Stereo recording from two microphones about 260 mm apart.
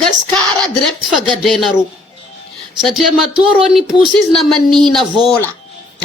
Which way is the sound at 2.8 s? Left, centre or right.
Centre.